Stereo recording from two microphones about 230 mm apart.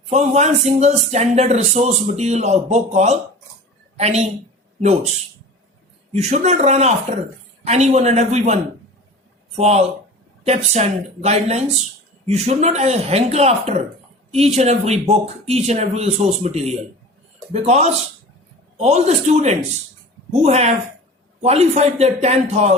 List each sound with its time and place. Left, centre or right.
0.1 s speech: right
6.1 s speech: right
9.6 s speech: right